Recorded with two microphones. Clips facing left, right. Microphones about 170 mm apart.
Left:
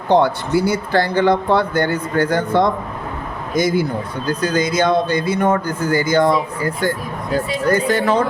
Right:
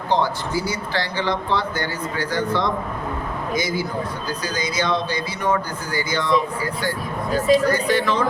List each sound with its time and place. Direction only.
0.1 s speech: 60° left (ahead or behind)